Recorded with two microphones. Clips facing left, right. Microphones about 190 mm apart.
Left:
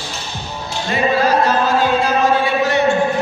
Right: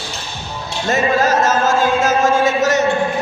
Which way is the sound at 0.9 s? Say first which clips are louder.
Even; 45° right (ahead or behind).